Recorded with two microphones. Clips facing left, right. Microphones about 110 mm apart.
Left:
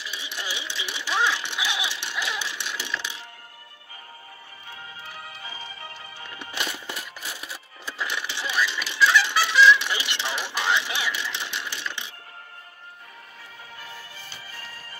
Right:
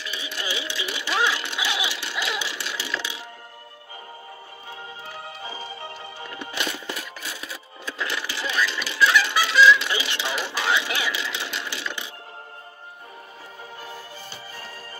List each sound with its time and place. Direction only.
0.0 s music: 5° left (ahead or behind)
5.0 s music: 30° right (ahead or behind)
6.6 s music: 10° left (ahead or behind)
8.2 s vehicle: 5° right (ahead or behind)
8.5 s music: 5° left (ahead or behind)
13.7 s music: 30° right (ahead or behind)